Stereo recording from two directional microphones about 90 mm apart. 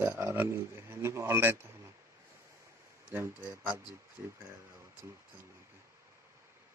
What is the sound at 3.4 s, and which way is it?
Speech, 40° right (ahead or behind).